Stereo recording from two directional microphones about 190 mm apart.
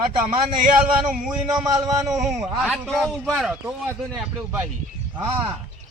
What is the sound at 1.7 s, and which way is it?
Speech, 15° right (ahead or behind).